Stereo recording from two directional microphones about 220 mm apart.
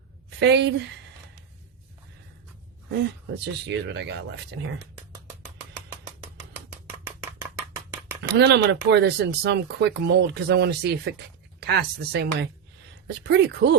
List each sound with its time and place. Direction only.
0.3 s a woman's voice: 50° right (ahead or behind)
3.4 s speech: 50° right (ahead or behind)
8.2 s speech: 50° right (ahead or behind)